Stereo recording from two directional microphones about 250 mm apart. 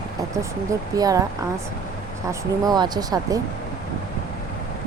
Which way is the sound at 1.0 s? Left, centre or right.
Centre.